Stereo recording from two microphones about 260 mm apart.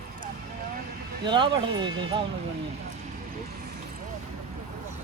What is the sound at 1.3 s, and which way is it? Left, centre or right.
Speech, centre.